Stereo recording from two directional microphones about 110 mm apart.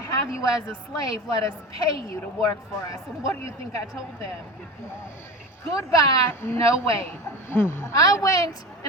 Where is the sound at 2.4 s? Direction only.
30° left (ahead or behind).